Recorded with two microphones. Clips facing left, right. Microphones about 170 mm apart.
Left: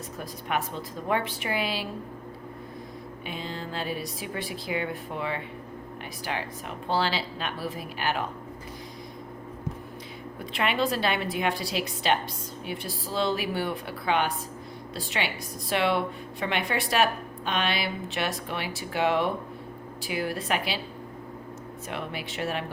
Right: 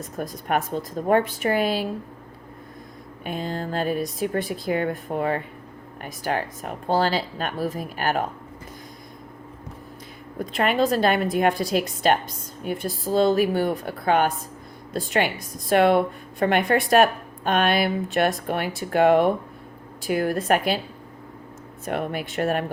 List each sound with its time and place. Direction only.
0.2 s speech: 45° right (ahead or behind)
3.2 s speech: 50° right (ahead or behind)
10.3 s speech: 45° right (ahead or behind)
21.8 s speech: 50° right (ahead or behind)